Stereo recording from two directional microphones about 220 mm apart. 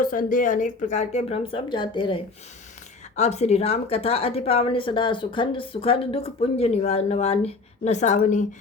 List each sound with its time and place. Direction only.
0.0 s a woman's voice: 40° left (ahead or behind)